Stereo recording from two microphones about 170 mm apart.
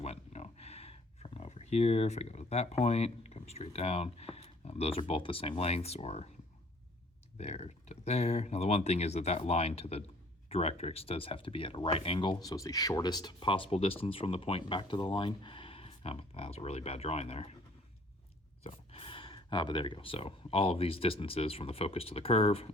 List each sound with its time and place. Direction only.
0.0 s a sound: 40° left (ahead or behind)
7.3 s speech: 40° left (ahead or behind)
18.6 s speech: 35° left (ahead or behind)